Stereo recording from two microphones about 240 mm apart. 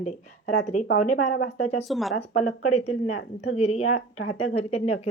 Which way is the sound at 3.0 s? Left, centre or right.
Left.